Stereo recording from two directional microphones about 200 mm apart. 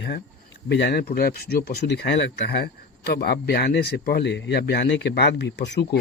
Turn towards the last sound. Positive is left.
turn(degrees=55)  # may be behind; listen again after turning